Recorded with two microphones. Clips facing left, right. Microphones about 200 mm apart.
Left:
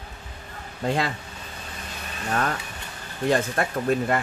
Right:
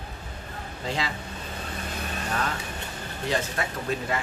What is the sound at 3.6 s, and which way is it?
Speech, 55° left (ahead or behind).